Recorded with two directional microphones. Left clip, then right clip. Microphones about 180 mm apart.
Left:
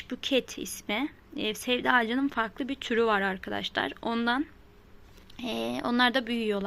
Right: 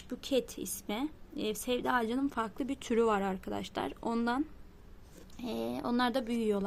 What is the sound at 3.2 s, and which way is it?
Speech, 5° right (ahead or behind).